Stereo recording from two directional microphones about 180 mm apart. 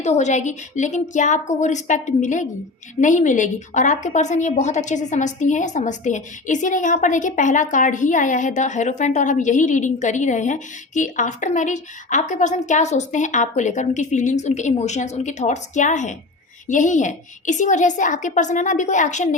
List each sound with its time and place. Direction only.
0.0 s a woman's voice: 40° left (ahead or behind)